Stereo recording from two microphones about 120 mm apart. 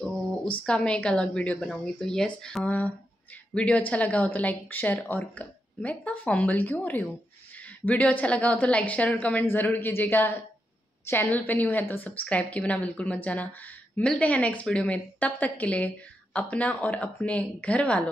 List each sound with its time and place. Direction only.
0.7 s a woman's voice: 10° left (ahead or behind)